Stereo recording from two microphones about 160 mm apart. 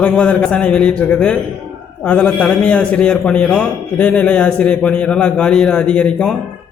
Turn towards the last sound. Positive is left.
turn(degrees=5)  # may be behind; listen again after turning